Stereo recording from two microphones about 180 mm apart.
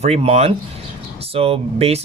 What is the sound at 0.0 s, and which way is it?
Speech, 35° right (ahead or behind).